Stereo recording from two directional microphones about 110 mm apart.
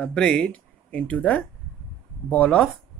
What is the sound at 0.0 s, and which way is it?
A woman's voice, 10° left (ahead or behind).